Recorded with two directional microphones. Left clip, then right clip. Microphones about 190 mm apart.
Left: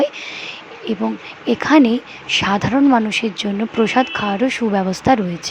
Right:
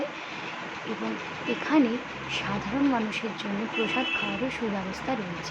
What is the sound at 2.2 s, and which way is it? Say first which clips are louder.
Speech: left 15 dB; 50° left (ahead or behind).